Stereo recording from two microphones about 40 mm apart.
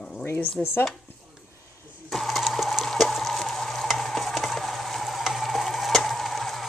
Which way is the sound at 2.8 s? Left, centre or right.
Centre.